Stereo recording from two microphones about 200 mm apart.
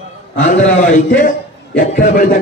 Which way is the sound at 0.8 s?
40° left (ahead or behind).